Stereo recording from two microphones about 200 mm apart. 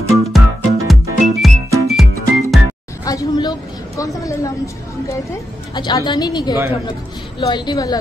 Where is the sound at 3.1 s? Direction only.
20° left (ahead or behind).